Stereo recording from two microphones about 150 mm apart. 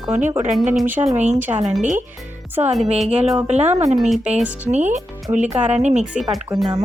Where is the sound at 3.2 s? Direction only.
Centre (ahead or behind).